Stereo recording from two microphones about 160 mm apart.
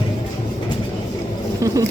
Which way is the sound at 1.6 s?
20° right (ahead or behind).